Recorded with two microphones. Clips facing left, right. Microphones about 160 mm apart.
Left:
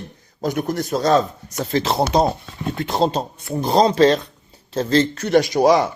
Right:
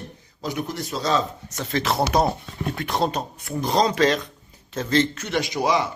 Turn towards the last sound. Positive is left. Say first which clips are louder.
# left 7 dB
turn(degrees=40)  # may be behind; listen again after turning